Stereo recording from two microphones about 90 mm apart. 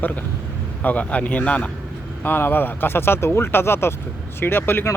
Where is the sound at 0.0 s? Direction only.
15° left (ahead or behind).